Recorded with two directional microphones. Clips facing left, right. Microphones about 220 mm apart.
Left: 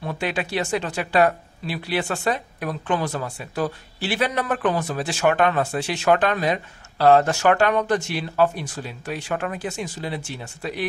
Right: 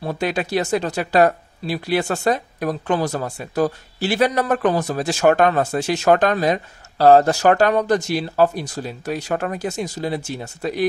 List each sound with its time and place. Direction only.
0.0 s speech: 40° right (ahead or behind)